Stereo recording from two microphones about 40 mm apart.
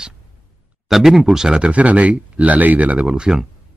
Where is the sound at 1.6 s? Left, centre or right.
Right.